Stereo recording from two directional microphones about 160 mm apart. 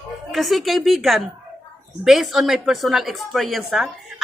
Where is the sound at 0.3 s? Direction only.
Centre (ahead or behind).